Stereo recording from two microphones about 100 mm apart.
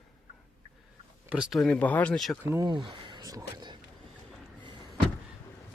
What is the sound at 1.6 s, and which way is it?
Speech, 15° left (ahead or behind).